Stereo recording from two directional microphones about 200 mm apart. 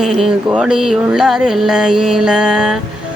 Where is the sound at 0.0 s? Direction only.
Centre (ahead or behind).